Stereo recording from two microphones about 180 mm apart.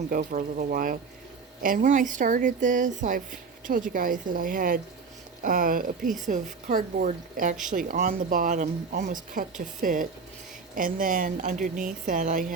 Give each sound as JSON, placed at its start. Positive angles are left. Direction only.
{"t": 0.1, "sound": "speech", "side_deg": -50}